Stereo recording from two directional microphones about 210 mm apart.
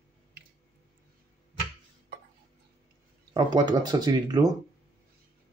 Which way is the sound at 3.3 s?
20° right (ahead or behind).